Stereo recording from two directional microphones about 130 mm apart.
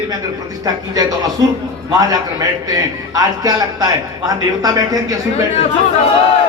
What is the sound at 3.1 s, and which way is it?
A man's voice, 25° right (ahead or behind).